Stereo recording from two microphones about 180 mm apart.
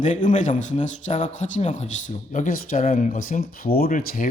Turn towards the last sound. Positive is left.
turn(degrees=50)  # may be behind; listen again after turning